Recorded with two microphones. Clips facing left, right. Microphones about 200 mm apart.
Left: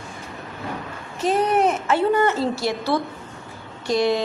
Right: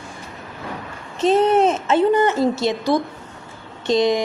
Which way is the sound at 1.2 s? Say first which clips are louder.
Right 4 dB; 25° right (ahead or behind).